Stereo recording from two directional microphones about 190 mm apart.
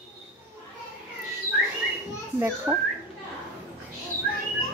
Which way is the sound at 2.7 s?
15° right (ahead or behind).